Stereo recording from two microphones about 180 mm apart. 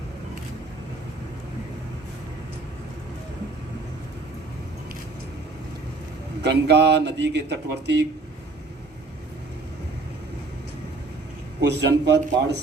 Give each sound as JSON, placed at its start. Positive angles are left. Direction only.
{"t": 6.4, "sound": "speech", "side_deg": -70}
{"t": 11.6, "sound": "a man's voice", "side_deg": -70}